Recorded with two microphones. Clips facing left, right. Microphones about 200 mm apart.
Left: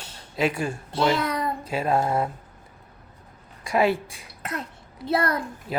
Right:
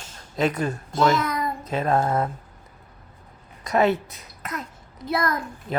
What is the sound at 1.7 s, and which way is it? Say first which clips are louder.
Speech: right 1 dB; 10° left (ahead or behind).